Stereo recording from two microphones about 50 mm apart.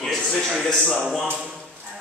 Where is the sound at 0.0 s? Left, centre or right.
Centre.